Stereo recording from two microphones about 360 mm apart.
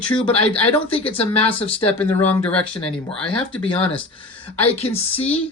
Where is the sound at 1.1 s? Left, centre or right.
Centre.